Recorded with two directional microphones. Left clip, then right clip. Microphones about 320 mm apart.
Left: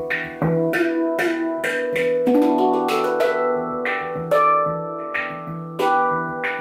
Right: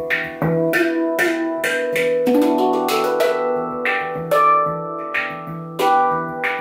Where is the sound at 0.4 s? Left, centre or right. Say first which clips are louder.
Right 1 dB; centre.